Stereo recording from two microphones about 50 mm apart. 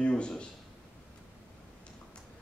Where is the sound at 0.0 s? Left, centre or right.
Centre.